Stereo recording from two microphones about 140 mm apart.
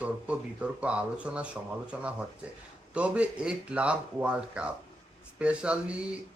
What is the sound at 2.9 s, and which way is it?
Speech, 10° right (ahead or behind).